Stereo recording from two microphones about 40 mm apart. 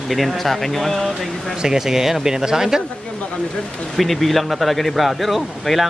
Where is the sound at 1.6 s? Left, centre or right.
Centre.